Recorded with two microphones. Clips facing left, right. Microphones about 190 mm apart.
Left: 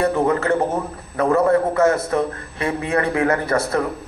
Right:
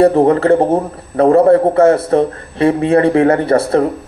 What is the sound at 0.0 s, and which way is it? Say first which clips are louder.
A man's voice: right 9 dB; 35° right (ahead or behind).